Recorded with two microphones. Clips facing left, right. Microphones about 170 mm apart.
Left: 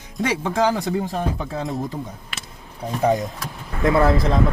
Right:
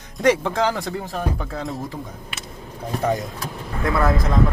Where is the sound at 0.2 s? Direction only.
10° left (ahead or behind).